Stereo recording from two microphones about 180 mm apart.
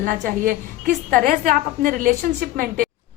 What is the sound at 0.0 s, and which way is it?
A woman's voice, 50° right (ahead or behind).